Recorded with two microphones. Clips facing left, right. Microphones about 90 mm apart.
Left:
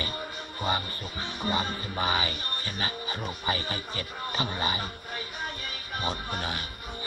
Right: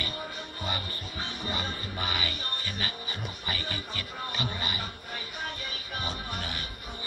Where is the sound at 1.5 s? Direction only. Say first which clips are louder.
Left 7 dB; 30° left (ahead or behind).